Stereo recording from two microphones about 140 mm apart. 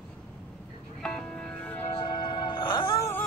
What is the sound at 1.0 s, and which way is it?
Music, 5° left (ahead or behind).